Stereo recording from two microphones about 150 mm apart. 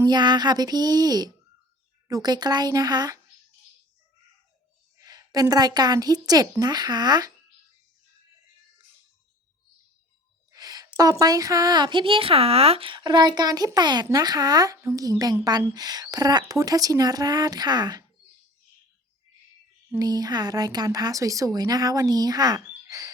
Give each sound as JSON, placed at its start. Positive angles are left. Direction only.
{"t": 0.0, "sound": "a woman's voice", "side_deg": -30}
{"t": 4.9, "sound": "a woman's voice", "side_deg": -25}
{"t": 10.5, "sound": "a woman's voice", "side_deg": -25}
{"t": 20.0, "sound": "a woman's voice", "side_deg": -25}